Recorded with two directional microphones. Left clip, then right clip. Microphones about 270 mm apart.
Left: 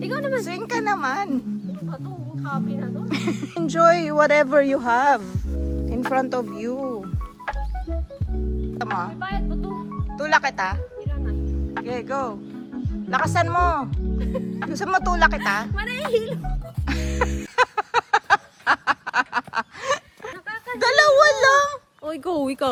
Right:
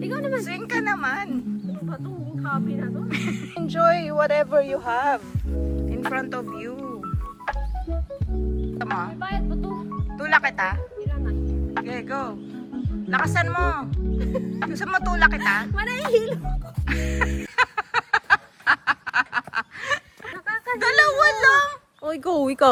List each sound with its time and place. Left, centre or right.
0.0 s music: left
0.4 s speech: centre
2.4 s speech: left
8.8 s speech: centre
11.2 s music: centre
13.1 s speech: centre
14.2 s speech: centre
14.7 s speech: centre
15.6 s speech: centre
16.8 s music: centre
20.7 s a sound: centre
22.0 s speech: centre